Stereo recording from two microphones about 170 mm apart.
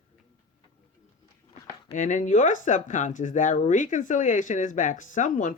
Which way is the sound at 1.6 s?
50° left (ahead or behind).